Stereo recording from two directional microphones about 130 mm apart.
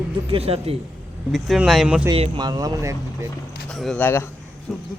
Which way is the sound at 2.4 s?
30° right (ahead or behind).